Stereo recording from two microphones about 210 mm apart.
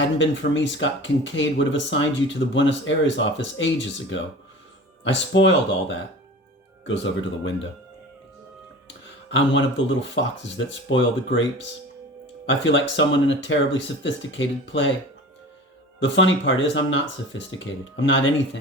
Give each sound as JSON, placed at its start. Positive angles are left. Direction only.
{"t": 0.2, "sound": "speech", "side_deg": 60}
{"t": 9.3, "sound": "speech", "side_deg": 60}
{"t": 16.0, "sound": "speech", "side_deg": 60}